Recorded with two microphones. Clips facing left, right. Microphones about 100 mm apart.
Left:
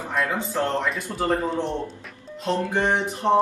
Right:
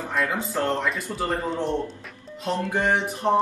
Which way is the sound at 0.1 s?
Centre (ahead or behind).